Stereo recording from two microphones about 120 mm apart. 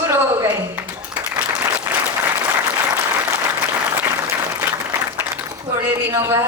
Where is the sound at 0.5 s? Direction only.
15° right (ahead or behind).